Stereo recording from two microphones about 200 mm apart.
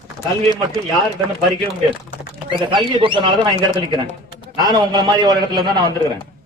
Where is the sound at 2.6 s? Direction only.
25° right (ahead or behind).